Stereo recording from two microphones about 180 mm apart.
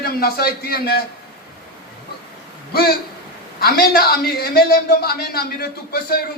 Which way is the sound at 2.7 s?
60° left (ahead or behind).